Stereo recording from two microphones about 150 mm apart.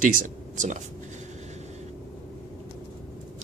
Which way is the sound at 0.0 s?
65° right (ahead or behind).